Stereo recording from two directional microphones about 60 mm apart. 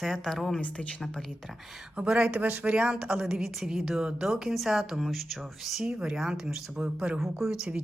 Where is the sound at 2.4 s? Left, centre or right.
Right; by 6.7 s centre.